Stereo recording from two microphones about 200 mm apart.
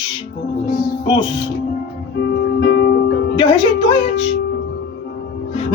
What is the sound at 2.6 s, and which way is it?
Music, 50° left (ahead or behind).